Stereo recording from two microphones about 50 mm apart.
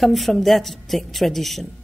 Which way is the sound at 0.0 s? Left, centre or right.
Centre.